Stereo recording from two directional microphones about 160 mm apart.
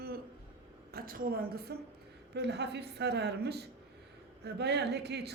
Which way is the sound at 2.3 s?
90° right.